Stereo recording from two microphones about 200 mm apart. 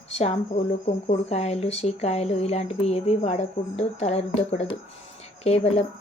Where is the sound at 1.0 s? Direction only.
30° left (ahead or behind).